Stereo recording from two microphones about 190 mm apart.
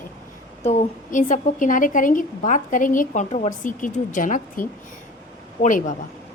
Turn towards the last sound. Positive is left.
turn(degrees=40)  # may be behind; listen again after turning